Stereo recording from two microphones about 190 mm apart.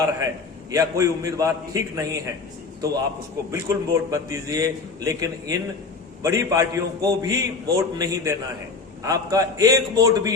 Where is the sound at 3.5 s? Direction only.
15° right (ahead or behind).